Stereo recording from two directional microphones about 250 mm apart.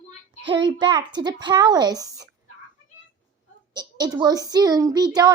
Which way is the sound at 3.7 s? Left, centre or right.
Centre.